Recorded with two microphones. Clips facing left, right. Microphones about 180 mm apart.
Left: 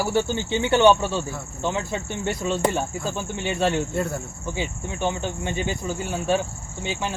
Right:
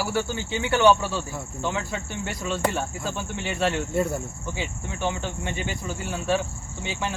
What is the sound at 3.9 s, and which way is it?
Speech, 10° right (ahead or behind).